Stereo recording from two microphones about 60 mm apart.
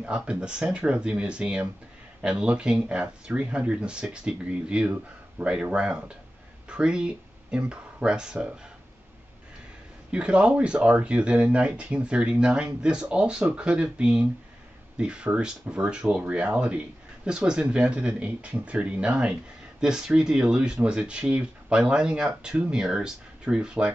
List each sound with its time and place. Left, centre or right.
0.0 s speech: centre
10.1 s speech: centre